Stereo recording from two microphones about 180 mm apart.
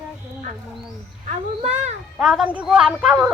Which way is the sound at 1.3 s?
40° right (ahead or behind).